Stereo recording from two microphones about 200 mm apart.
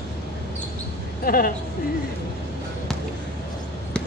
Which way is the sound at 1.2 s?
45° left (ahead or behind).